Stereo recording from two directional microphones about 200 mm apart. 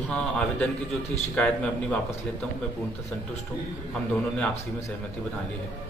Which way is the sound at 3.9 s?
5° left (ahead or behind).